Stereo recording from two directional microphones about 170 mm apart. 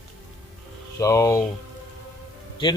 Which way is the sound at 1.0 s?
15° left (ahead or behind).